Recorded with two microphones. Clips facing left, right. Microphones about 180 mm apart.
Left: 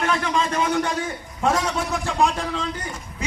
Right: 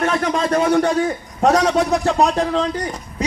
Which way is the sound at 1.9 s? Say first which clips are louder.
Right 5 dB; 40° right (ahead or behind).